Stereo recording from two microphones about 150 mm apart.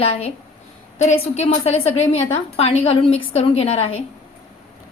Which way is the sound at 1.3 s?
45° left (ahead or behind).